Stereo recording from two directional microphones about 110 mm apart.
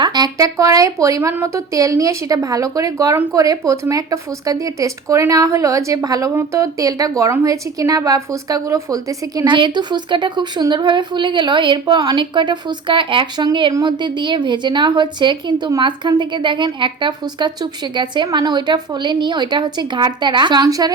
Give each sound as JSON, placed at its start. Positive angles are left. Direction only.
{"t": 0.0, "sound": "speech", "side_deg": -40}
{"t": 9.5, "sound": "a woman's voice", "side_deg": -45}